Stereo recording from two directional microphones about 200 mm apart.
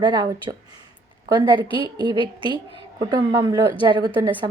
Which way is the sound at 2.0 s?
20° right (ahead or behind).